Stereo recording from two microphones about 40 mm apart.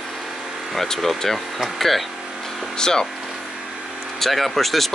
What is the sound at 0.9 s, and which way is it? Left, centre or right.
Speech, centre.